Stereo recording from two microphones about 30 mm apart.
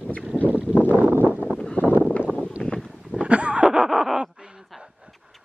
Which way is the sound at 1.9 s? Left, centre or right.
Right.